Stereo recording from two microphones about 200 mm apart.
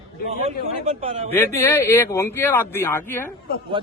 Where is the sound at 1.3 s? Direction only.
10° left (ahead or behind).